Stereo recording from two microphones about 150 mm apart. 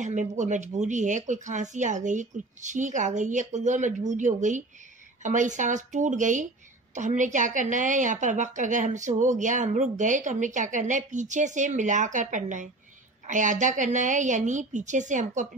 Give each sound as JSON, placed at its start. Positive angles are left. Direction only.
{"t": 0.0, "sound": "a woman's voice", "side_deg": -55}